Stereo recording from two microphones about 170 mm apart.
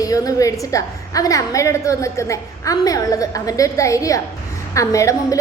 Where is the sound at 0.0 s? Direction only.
20° left (ahead or behind).